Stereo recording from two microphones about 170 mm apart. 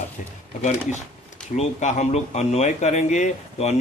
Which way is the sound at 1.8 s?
45° left (ahead or behind).